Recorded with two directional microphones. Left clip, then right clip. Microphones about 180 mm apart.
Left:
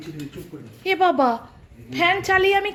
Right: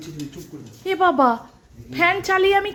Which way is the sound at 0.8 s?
10° right (ahead or behind).